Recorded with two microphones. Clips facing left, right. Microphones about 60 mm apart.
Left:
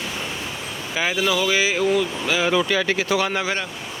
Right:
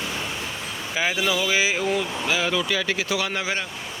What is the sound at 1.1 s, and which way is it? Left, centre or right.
Speech, centre.